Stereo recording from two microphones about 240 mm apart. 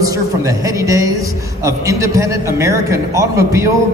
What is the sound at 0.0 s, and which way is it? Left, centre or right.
A man's voice, centre.